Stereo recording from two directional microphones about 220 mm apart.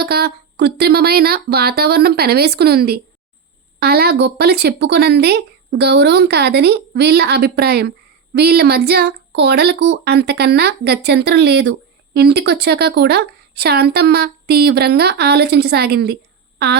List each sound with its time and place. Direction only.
0.0 s speech: 45° right (ahead or behind)